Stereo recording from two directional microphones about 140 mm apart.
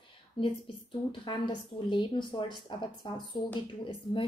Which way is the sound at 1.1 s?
35° left (ahead or behind).